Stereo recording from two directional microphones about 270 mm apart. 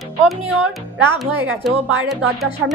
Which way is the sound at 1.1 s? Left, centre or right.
Centre.